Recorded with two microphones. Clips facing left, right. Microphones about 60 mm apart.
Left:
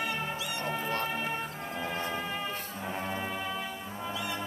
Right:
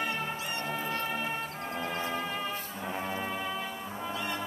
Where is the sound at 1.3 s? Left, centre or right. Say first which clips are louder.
Even; centre.